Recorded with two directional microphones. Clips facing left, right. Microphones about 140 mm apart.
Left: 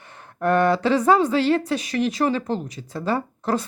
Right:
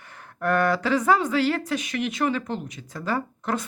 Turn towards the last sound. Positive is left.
turn(degrees=35)  # may be behind; listen again after turning